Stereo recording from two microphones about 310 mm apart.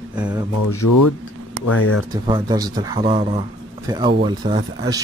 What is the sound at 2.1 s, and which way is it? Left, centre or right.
Speech, centre.